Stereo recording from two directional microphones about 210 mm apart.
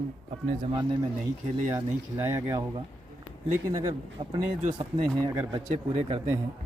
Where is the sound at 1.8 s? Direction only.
15° right (ahead or behind).